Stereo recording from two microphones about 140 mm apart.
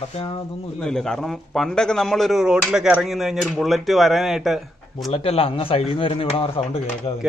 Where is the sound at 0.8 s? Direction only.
5° left (ahead or behind).